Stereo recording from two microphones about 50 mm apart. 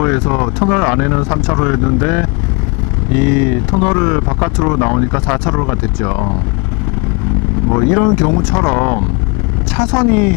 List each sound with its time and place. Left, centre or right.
0.0 s speech: left
7.7 s speech: left